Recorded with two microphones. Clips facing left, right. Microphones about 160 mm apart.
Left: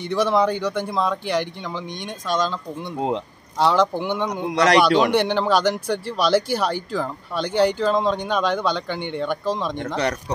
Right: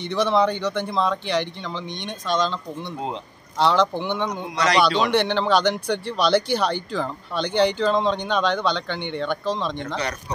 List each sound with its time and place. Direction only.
0.0 s speech: 10° left (ahead or behind)
4.5 s a man's voice: 60° left (ahead or behind)
4.9 s speech: 10° left (ahead or behind)